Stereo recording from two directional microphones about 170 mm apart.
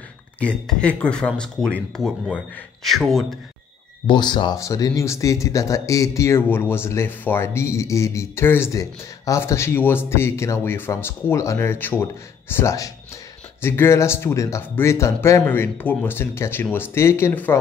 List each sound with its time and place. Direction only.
0.4 s speech: 5° left (ahead or behind)
4.1 s speech: 25° left (ahead or behind)